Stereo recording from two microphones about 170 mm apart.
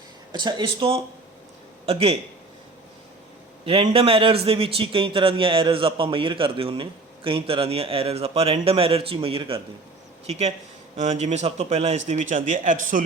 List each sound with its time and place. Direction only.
0.3 s a man's voice: 25° right (ahead or behind)
3.7 s a man's voice: 35° right (ahead or behind)